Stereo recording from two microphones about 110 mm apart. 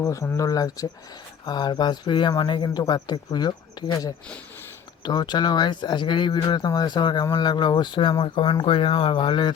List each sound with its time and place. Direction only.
0.0 s speech: 30° left (ahead or behind); by 9.6 s 45° left (ahead or behind)